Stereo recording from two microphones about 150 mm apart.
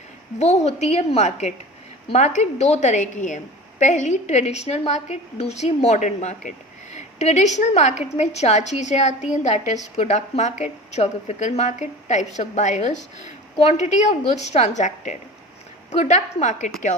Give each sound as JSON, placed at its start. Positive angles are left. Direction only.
{"t": 0.3, "sound": "a woman's voice", "side_deg": 50}